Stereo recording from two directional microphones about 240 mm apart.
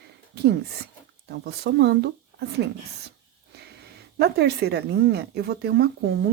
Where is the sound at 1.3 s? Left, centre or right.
Right.